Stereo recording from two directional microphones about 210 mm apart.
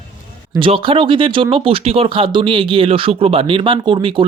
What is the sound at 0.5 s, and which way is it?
Speech, 25° right (ahead or behind).